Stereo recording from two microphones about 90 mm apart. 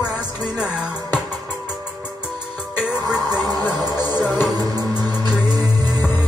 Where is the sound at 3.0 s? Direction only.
45° right (ahead or behind).